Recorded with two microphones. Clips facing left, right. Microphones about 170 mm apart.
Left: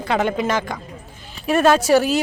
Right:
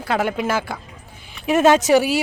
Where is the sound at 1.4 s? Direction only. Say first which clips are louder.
Right 1 dB; 20° right (ahead or behind).